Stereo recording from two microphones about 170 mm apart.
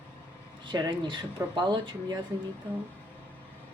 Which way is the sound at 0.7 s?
25° right (ahead or behind).